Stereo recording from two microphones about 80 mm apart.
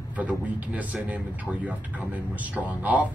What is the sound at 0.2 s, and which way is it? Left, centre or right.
Speech, centre.